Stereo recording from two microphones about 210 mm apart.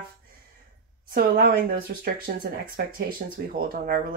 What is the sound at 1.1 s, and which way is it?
Speech, 45° right (ahead or behind).